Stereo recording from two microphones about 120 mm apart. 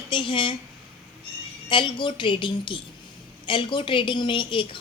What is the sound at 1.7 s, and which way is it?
A woman's voice, 40° left (ahead or behind).